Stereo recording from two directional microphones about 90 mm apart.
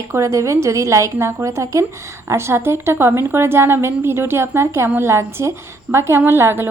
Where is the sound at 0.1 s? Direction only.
35° right (ahead or behind).